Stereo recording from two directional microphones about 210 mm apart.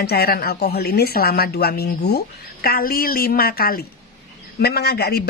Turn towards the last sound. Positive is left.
turn(degrees=50)  # may be behind; listen again after turning